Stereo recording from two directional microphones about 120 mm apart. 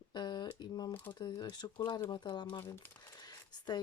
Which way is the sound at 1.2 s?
40° left (ahead or behind).